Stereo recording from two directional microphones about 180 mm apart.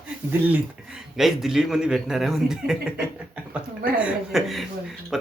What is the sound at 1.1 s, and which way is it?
Speech, centre (ahead or behind).